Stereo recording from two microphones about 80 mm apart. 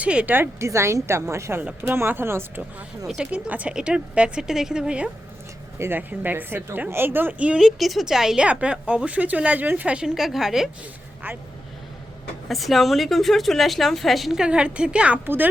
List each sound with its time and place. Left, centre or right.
0.0 s a woman's voice: centre
0.3 s a woman's voice: right
1.6 s speech: right
3.2 s a woman's voice: centre
5.8 s speech: right
7.8 s a woman's voice: centre
10.2 s a woman's voice: centre
12.5 s a woman's voice: centre